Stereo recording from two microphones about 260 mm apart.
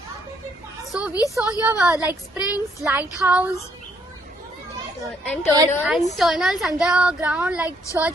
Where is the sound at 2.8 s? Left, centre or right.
Centre.